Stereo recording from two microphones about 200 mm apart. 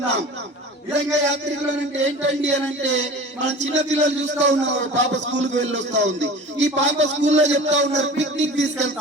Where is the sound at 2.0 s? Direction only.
65° right (ahead or behind).